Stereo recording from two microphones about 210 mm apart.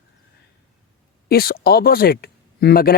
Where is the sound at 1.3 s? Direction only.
45° left (ahead or behind).